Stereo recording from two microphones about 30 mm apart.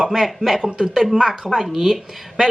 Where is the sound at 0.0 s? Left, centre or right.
Centre.